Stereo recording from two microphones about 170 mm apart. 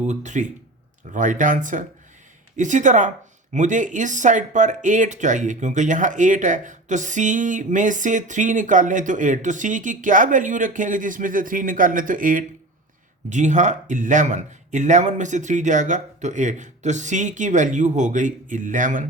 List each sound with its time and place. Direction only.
0.0 s speech: 45° right (ahead or behind)